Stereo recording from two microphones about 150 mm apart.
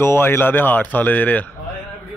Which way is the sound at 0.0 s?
15° left (ahead or behind).